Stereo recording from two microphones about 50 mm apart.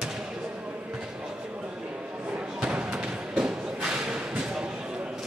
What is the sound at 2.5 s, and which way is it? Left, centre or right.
Thump, centre.